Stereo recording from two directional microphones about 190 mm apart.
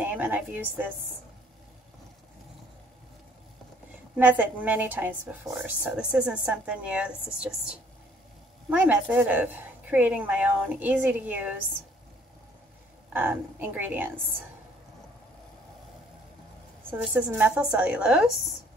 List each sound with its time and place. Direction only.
0.0 s speech: 10° right (ahead or behind)
4.2 s speech: 10° right (ahead or behind)
13.1 s speech: 10° right (ahead or behind)
16.9 s a woman's voice: 10° right (ahead or behind)